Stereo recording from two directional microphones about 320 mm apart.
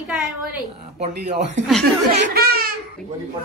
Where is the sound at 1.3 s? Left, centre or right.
Right.